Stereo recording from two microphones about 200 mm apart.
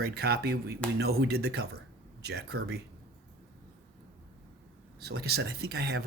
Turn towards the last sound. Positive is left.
turn(degrees=-50)  # may be behind; listen again after turning